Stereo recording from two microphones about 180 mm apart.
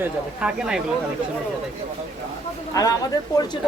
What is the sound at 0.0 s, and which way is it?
Speech, 5° right (ahead or behind).